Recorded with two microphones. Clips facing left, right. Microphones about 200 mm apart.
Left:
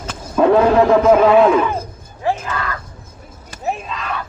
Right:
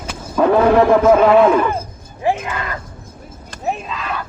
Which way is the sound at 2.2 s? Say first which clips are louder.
Right 1 dB; 15° right (ahead or behind).